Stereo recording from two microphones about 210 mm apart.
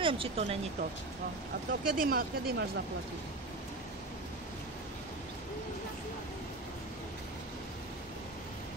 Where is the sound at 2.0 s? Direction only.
45° right (ahead or behind).